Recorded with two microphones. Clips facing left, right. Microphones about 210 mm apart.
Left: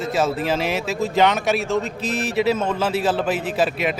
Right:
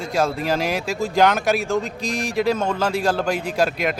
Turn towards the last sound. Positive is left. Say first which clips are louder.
# even
turn(degrees=5)  # may be behind; listen again after turning